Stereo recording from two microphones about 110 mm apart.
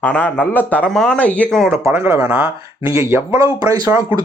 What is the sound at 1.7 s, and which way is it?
Speech, 20° right (ahead or behind).